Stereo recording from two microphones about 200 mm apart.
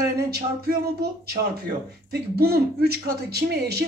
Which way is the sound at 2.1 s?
50° right (ahead or behind).